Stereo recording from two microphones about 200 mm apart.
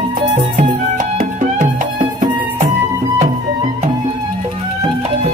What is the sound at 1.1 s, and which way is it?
Music, 40° right (ahead or behind).